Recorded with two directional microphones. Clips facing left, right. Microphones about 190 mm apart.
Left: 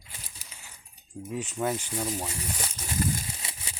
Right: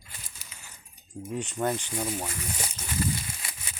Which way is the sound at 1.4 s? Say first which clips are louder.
Right 1 dB; 5° left (ahead or behind).